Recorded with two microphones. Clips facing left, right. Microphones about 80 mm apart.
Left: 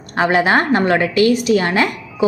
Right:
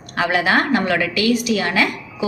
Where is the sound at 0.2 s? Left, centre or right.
Left.